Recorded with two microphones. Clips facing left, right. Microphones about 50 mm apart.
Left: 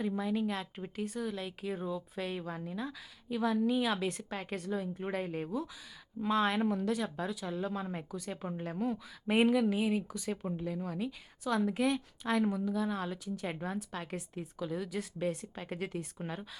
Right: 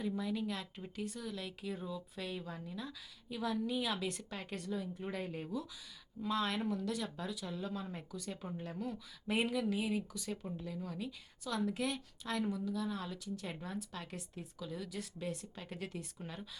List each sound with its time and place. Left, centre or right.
0.0 s a woman's voice: left
4.6 s a woman's voice: left